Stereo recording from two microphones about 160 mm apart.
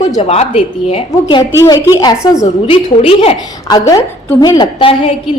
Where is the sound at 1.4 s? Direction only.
25° left (ahead or behind).